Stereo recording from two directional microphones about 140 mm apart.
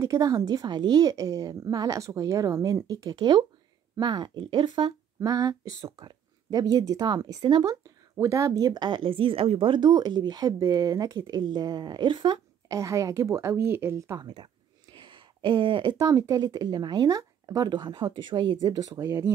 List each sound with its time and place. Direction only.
0.0 s speech: 25° right (ahead or behind)
14.2 s speech: 35° right (ahead or behind)